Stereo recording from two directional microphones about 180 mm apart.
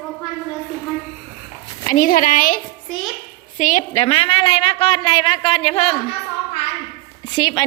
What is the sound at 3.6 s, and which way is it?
A woman's voice, 45° left (ahead or behind).